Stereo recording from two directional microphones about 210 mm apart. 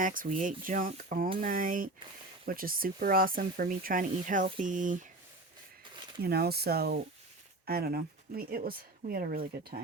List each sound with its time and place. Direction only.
0.0 s speech: 40° right (ahead or behind)
6.2 s speech: 50° right (ahead or behind)